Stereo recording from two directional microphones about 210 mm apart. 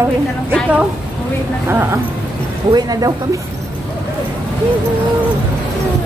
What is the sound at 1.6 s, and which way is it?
Speech, 10° right (ahead or behind).